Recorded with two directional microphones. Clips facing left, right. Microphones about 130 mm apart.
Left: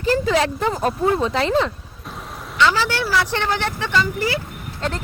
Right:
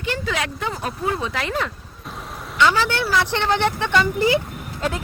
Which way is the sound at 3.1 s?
20° right (ahead or behind).